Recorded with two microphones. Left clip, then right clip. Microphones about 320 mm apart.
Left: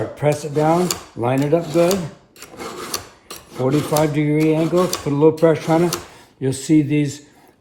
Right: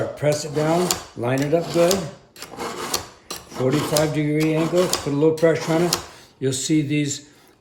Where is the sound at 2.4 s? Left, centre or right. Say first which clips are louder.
Right 2 dB; centre.